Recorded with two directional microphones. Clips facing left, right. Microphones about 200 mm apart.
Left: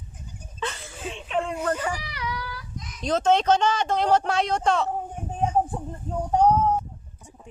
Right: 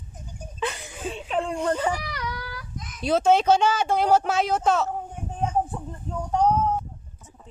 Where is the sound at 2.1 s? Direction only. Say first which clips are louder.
Even; 45° right (ahead or behind).